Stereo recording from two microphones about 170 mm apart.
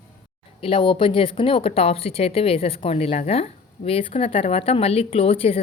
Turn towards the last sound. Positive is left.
turn(degrees=35)  # may be behind; listen again after turning